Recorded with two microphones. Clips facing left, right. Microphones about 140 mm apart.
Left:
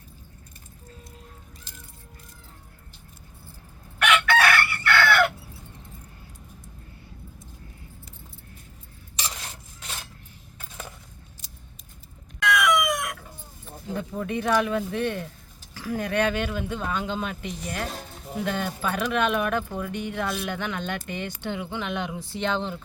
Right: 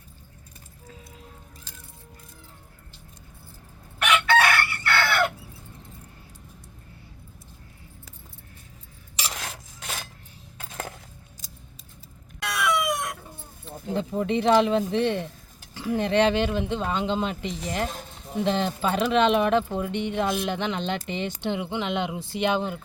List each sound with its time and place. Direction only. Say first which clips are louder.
4.3 s chicken: right 1 dB; 25° right (ahead or behind)
9.4 s filing: right 4 dB; 90° right
10.6 s crushing: right 5 dB; 80° right
12.4 s chicken: left 3 dB; 35° right (ahead or behind)
13.7 s speech: right 4 dB; 25° right (ahead or behind)